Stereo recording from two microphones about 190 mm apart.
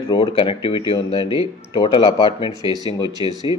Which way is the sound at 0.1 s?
30° left (ahead or behind).